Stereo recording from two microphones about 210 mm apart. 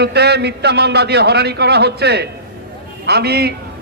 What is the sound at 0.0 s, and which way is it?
A man's voice, 50° right (ahead or behind).